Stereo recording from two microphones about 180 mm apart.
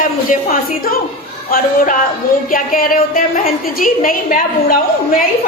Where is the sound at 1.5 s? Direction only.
50° left (ahead or behind).